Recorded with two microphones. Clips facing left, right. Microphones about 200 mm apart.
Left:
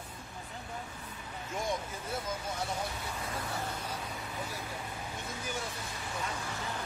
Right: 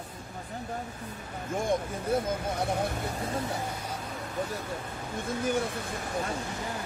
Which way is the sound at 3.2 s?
35° right (ahead or behind).